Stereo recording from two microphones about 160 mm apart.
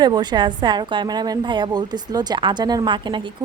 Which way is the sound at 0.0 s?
25° right (ahead or behind).